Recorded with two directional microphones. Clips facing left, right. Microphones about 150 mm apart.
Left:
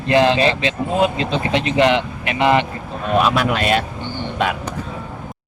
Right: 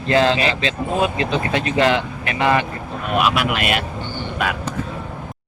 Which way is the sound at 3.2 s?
35° left (ahead or behind).